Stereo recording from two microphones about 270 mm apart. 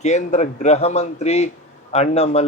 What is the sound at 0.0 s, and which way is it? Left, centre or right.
Speech, left.